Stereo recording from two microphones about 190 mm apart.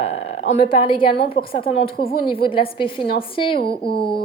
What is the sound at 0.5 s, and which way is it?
A woman's voice, 30° left (ahead or behind).